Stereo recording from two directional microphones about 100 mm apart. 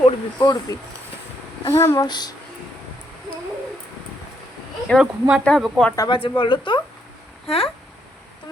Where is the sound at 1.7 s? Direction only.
30° left (ahead or behind).